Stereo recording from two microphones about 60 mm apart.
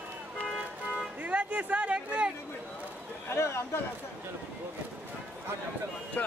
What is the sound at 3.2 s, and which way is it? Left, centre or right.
Speech, left.